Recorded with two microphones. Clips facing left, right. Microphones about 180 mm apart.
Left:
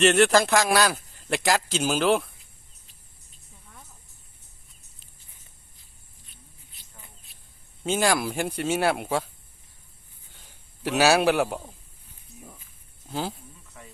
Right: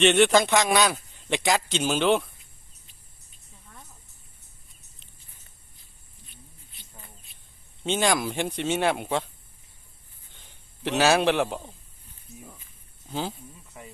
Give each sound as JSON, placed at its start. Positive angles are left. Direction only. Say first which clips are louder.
{"t": 0.0, "sound": "speech", "louder": "even", "side_deg": 0}
{"t": 7.3, "sound": "a sound", "louder": "left 1 dB", "side_deg": 0}
{"t": 7.9, "sound": "speech", "louder": "left 1 dB", "side_deg": 5}
{"t": 10.3, "sound": "a man's voice", "louder": "even", "side_deg": 5}
{"t": 13.1, "sound": "speech", "louder": "even", "side_deg": 0}